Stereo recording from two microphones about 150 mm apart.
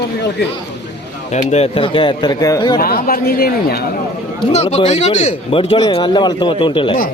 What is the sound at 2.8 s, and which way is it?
Speech, 75° left (ahead or behind).